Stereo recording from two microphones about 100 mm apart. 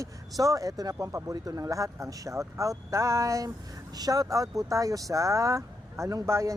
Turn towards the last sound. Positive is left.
turn(degrees=-30)  # may be behind; listen again after turning